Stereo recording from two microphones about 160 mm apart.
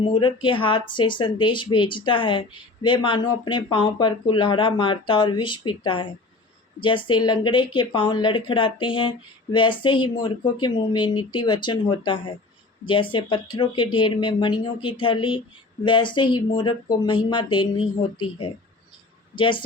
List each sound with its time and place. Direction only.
0.0 s speech: 30° left (ahead or behind)